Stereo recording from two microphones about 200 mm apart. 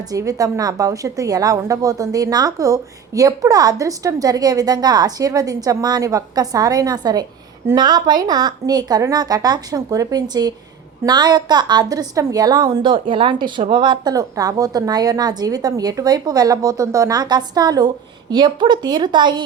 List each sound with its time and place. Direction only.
0.1 s a woman's voice: 15° right (ahead or behind)